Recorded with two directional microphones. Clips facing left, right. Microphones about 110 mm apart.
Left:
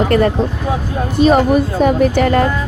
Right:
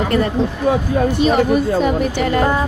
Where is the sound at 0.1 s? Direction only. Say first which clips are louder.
Left 4 dB; 55° left (ahead or behind).